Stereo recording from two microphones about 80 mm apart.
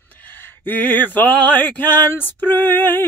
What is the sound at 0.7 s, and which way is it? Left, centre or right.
Male singing, left.